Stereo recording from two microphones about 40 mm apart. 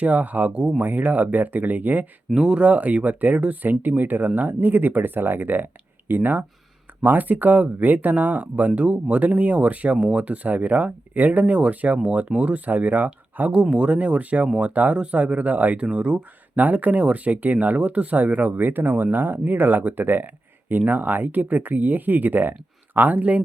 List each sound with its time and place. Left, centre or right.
0.0 s speech: right
2.3 s speech: right
2.6 s speech: right
13.5 s speech: right
16.6 s speech: right